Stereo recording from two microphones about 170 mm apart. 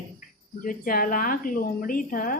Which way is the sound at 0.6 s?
55° left (ahead or behind).